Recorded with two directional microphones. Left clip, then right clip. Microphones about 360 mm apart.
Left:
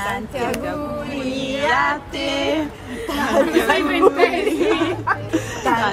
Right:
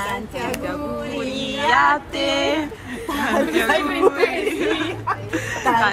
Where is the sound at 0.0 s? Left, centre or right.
Centre.